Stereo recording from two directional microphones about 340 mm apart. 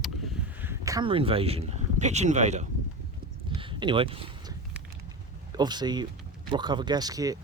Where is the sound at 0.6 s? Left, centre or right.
Centre.